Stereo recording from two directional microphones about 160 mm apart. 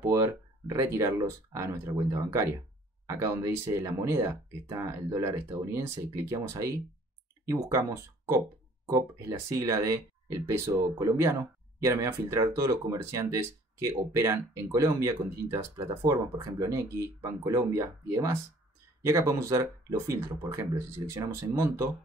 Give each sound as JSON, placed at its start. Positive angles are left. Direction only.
{"t": 0.0, "sound": "speech", "side_deg": -20}
{"t": 9.5, "sound": "speech", "side_deg": -20}